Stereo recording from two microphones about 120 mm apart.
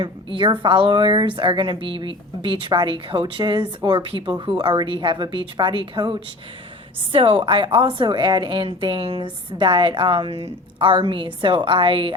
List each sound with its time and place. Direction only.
0.0 s a woman's voice: 45° right (ahead or behind)